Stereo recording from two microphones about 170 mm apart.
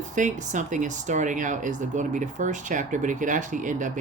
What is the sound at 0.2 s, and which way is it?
Speech, 45° right (ahead or behind).